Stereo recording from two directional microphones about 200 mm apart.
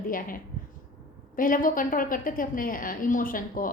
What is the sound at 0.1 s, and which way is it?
Speech, 45° left (ahead or behind).